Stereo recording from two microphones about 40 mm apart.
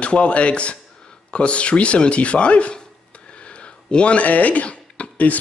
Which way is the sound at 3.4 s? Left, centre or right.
Left.